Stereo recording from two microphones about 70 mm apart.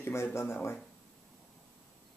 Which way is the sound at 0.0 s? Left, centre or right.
Left.